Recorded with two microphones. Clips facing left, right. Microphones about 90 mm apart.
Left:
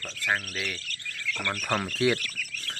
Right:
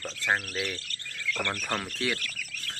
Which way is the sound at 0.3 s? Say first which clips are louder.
Right 1 dB; 15° right (ahead or behind).